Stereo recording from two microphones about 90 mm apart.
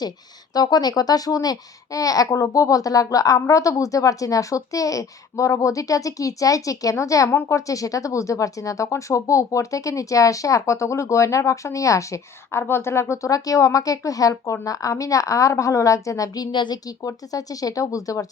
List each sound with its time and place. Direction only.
0.5 s speech: 50° left (ahead or behind)
16.5 s speech: 55° left (ahead or behind); by 18.3 s 40° left (ahead or behind)